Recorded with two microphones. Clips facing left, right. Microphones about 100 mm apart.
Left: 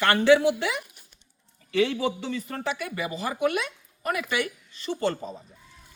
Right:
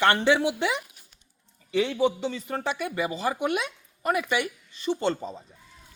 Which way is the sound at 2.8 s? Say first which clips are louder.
Right 3 dB; 25° right (ahead or behind).